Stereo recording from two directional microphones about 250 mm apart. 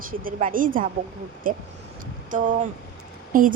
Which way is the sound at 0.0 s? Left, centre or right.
Right.